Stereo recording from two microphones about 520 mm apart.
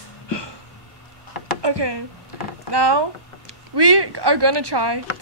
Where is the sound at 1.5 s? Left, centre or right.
Right.